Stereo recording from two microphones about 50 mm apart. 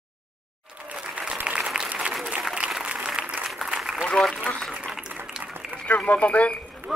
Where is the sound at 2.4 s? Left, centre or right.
Centre.